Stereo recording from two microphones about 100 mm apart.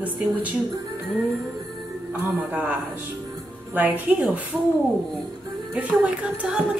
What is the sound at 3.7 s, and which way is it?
Speech, 15° right (ahead or behind).